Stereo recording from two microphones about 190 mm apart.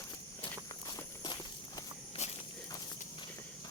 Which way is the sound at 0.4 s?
25° left (ahead or behind).